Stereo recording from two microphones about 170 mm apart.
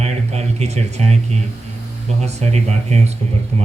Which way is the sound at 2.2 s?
40° right (ahead or behind).